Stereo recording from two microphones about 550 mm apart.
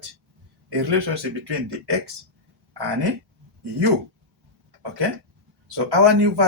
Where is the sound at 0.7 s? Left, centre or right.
Right.